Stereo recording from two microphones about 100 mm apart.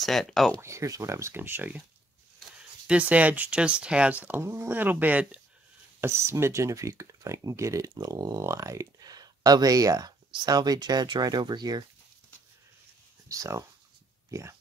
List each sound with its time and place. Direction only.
0.0 s speech: 5° left (ahead or behind)
0.6 s speech: 30° right (ahead or behind)
2.9 s speech: 15° right (ahead or behind)
4.4 s speech: 25° right (ahead or behind)
5.9 s speech: 30° right (ahead or behind); by 11.8 s 45° right (ahead or behind)
13.3 s speech: 30° right (ahead or behind)